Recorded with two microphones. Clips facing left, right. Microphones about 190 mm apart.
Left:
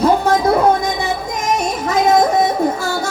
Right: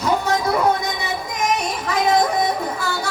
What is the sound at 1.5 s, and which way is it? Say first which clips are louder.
Music: left 5 dB; 45° left (ahead or behind).